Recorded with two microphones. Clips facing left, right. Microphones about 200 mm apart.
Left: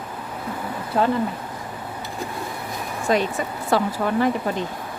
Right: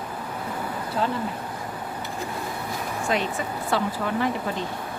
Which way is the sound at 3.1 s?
40° left (ahead or behind).